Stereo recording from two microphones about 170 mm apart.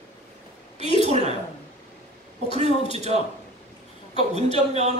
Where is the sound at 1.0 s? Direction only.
40° right (ahead or behind).